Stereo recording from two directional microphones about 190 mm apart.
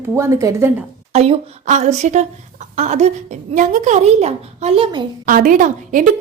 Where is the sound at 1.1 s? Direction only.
35° right (ahead or behind).